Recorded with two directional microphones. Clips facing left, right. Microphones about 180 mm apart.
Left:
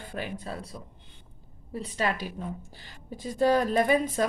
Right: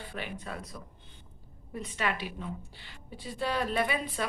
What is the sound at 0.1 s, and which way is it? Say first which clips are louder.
A woman's voice: left 5 dB; 40° left (ahead or behind).